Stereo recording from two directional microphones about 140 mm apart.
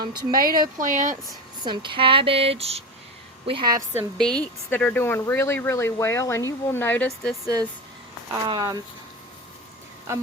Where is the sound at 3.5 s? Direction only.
35° right (ahead or behind).